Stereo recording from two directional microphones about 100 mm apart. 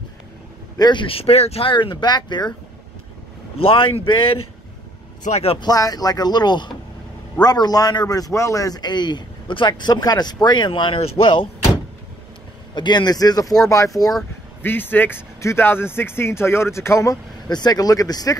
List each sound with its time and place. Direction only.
0.7 s a man's voice: 45° left (ahead or behind)
1.0 s speech: 75° left (ahead or behind); by 2.5 s 50° left (ahead or behind)
3.5 s speech: 65° left (ahead or behind)
5.3 s speech: 85° left
5.6 s a man's voice: 40° left (ahead or behind)
11.2 s door: 55° left (ahead or behind)
12.7 s speech: 50° left (ahead or behind)
14.6 s speech: 20° left (ahead or behind)
17.5 s speech: 45° left (ahead or behind)